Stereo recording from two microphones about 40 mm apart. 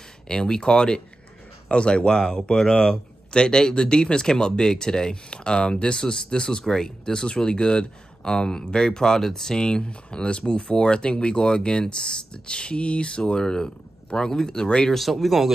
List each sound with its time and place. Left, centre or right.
0.3 s speech: centre
14.9 s speech: centre